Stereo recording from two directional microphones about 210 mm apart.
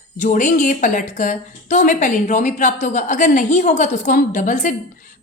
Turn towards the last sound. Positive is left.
turn(degrees=35)  # may be behind; listen again after turning